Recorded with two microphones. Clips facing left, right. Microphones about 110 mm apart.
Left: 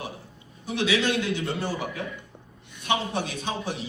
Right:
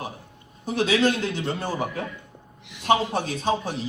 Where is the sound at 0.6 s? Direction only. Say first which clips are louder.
Right 4 dB; 40° right (ahead or behind).